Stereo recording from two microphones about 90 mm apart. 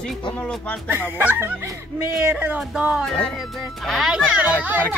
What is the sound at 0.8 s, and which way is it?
Speech, 25° right (ahead or behind).